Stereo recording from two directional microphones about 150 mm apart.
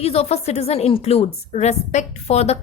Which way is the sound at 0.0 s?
40° left (ahead or behind).